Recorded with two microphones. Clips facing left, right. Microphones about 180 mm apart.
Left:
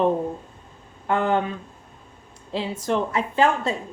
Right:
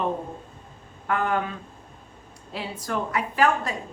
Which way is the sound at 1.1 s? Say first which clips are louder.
Left 4 dB; 25° left (ahead or behind).